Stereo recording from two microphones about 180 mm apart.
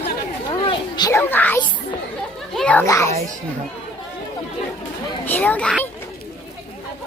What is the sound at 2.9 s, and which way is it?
Speech, 15° left (ahead or behind).